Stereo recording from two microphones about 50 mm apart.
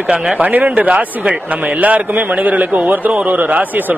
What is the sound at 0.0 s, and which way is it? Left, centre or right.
Speech, centre.